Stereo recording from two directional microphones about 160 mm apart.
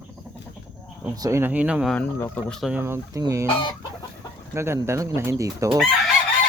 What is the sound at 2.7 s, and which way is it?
Speech, 15° right (ahead or behind).